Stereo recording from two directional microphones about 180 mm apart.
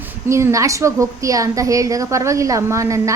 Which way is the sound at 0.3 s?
15° right (ahead or behind).